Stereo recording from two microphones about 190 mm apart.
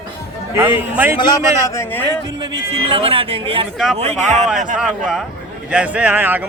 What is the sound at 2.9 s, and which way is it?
A man's voice, 30° right (ahead or behind).